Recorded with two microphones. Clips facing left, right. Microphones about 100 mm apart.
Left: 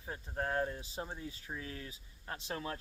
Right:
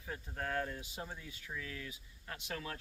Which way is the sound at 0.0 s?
30° left (ahead or behind).